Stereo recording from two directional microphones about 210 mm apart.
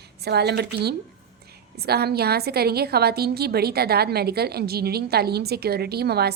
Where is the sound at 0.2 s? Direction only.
50° right (ahead or behind).